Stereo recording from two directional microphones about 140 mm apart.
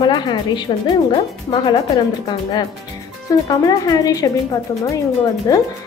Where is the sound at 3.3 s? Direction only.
25° left (ahead or behind).